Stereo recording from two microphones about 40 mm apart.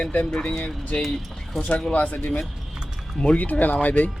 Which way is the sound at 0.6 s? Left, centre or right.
Left.